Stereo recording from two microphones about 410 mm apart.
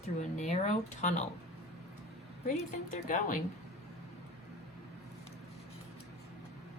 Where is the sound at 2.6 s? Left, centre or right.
Centre.